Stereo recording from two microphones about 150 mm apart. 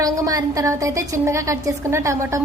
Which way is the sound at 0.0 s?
25° right (ahead or behind).